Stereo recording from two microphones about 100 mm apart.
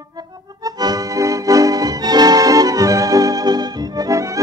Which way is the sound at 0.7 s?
40° right (ahead or behind).